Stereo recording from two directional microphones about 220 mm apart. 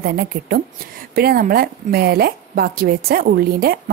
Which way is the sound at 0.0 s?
45° right (ahead or behind).